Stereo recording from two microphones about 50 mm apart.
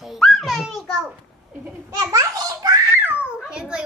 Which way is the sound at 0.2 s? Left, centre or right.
Centre.